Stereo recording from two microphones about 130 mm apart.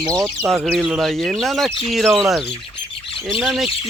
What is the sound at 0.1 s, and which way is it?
Speech, 25° right (ahead or behind).